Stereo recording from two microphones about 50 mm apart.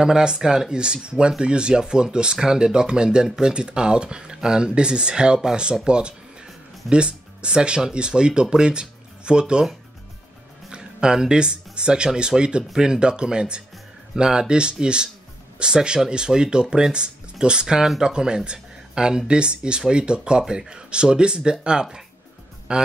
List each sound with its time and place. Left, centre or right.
0.0 s speech: centre